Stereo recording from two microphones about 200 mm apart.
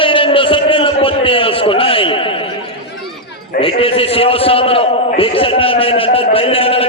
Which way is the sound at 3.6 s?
25° left (ahead or behind).